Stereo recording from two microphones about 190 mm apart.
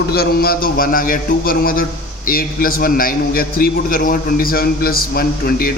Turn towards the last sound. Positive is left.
turn(degrees=50)  # may be behind; listen again after turning